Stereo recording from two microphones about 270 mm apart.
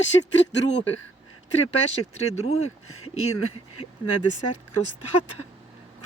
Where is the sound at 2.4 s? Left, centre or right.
Left.